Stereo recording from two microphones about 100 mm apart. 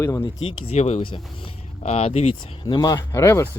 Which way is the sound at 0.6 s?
85° left.